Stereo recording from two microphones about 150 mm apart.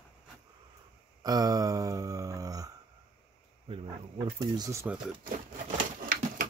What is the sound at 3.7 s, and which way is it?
Speech, 40° right (ahead or behind).